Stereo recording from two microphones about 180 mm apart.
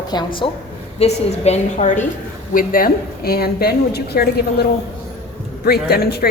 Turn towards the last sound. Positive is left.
turn(degrees=60)  # may be behind; listen again after turning